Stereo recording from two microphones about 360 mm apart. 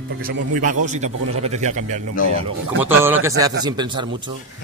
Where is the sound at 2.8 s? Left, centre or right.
Centre.